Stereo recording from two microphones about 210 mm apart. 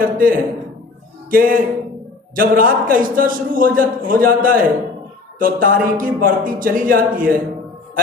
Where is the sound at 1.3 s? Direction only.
40° right (ahead or behind).